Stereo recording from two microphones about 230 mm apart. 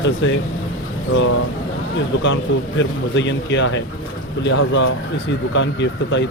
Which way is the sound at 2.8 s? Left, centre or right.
Left.